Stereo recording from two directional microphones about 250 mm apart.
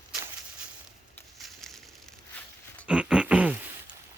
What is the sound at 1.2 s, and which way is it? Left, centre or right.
Crushing, centre.